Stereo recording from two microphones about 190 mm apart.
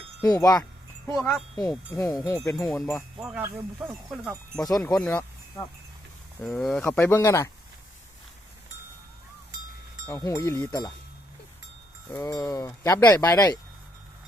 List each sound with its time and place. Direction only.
0.2 s speech: 15° left (ahead or behind)
1.0 s speech: 5° left (ahead or behind)
2.0 s speech: 20° left (ahead or behind)
2.6 s speech: centre (ahead or behind)
3.2 s speech: 10° right (ahead or behind)
4.1 s speech: centre (ahead or behind)
6.4 s speech: centre (ahead or behind)
10.1 s speech: 15° left (ahead or behind)
12.1 s speech: 15° left (ahead or behind)